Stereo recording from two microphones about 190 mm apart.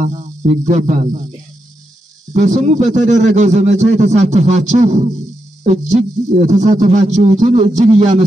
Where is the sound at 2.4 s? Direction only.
40° right (ahead or behind).